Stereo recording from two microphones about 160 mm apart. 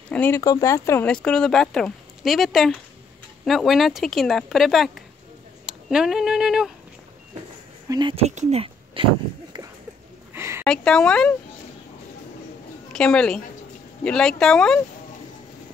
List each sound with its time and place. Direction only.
0.1 s speech: 10° left (ahead or behind)
0.4 s speech: 20° left (ahead or behind)
1.0 s speech: 5° left (ahead or behind)
7.9 s speech: 30° right (ahead or behind)
8.3 s a sound: 45° right (ahead or behind)
10.3 s a sound: 15° right (ahead or behind)
10.6 s speech: 5° left (ahead or behind)
12.9 s a woman's voice: 5° left (ahead or behind)